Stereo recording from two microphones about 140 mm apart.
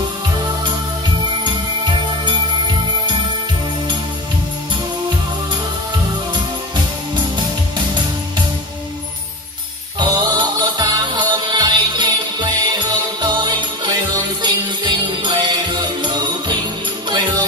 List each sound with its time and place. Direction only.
1.4 s music: 35° right (ahead or behind)
9.9 s music: 30° right (ahead or behind)
14.4 s jingle bell: 35° right (ahead or behind)